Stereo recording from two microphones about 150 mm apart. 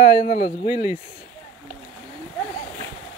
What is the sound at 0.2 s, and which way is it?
Speech, 55° left (ahead or behind).